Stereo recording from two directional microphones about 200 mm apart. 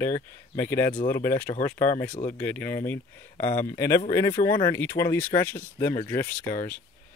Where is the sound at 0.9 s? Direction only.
40° left (ahead or behind).